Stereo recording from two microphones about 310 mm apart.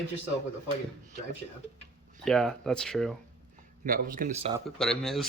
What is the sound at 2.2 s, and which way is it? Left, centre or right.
Speech, centre.